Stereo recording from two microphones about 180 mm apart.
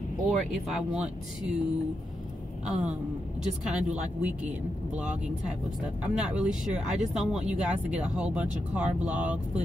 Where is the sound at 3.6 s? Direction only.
5° right (ahead or behind).